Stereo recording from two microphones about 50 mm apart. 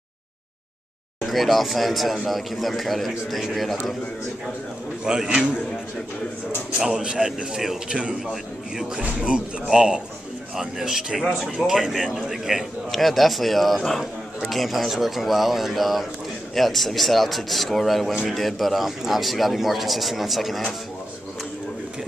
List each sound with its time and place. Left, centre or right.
1.2 s a man's voice: centre
5.0 s speech: centre
6.8 s a man's voice: centre